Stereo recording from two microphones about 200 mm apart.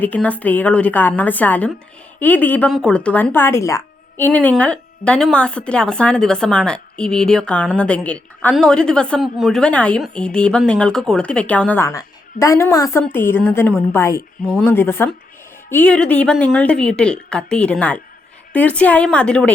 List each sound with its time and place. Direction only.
0.0 s a woman's voice: 5° left (ahead or behind)